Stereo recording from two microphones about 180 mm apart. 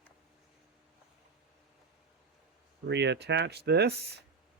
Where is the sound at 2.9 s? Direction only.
75° right (ahead or behind).